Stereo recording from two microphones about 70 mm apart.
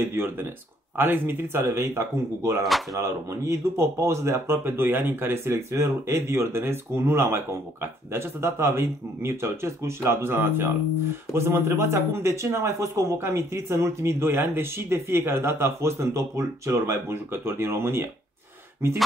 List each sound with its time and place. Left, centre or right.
0.0 s speech: right